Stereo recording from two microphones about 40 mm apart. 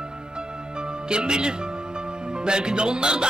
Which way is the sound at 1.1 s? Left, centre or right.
Right.